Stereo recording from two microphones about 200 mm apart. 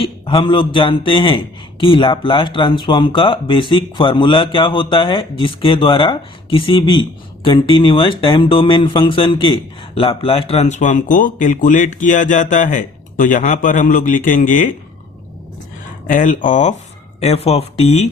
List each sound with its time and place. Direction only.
0.0 s a man's voice: 25° left (ahead or behind)
16.0 s speech: 40° left (ahead or behind)